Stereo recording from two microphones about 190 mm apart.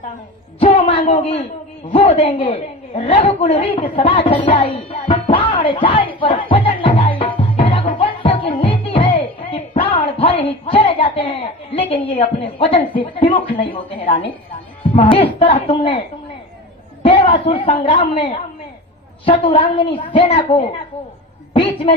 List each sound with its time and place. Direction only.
0.6 s a man's voice: 30° left (ahead or behind)
1.9 s a sound: 30° left (ahead or behind)
14.9 s a woman's voice: 30° left (ahead or behind)
17.0 s a woman's voice: 30° left (ahead or behind)